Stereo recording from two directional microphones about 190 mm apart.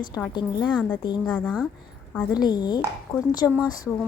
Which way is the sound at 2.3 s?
20° left (ahead or behind).